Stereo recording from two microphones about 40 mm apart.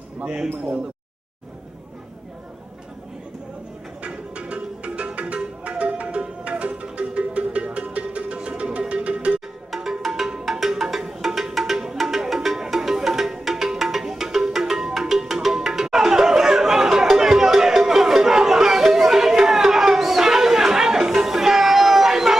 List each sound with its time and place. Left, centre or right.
4.0 s music: right
9.8 s music: centre